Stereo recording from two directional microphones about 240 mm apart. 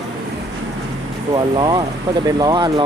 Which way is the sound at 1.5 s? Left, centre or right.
Centre.